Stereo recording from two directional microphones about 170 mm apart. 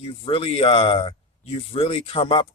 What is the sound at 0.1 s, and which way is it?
Speech, 30° left (ahead or behind).